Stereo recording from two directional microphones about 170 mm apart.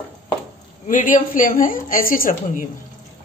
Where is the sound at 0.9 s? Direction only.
50° left (ahead or behind).